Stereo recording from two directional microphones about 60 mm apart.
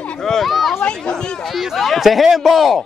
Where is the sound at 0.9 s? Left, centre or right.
Centre.